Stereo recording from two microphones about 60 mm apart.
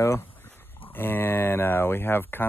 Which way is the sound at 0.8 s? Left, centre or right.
Left.